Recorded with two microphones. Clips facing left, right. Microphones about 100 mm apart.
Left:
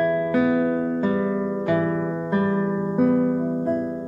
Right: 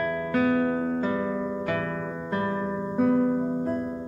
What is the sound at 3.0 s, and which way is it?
Music, 5° left (ahead or behind).